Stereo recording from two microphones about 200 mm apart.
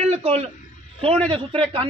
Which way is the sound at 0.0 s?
30° right (ahead or behind).